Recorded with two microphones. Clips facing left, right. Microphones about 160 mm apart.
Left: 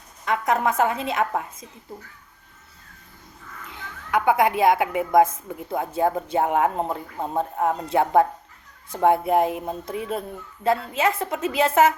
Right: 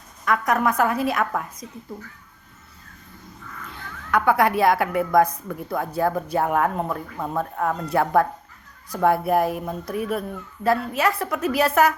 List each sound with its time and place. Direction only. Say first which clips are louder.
0.3 s a woman's voice: right 1 dB; 25° left (ahead or behind)
3.7 s a woman's voice: right 1 dB; 15° left (ahead or behind)